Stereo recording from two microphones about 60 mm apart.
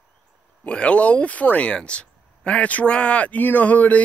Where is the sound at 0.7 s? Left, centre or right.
Centre.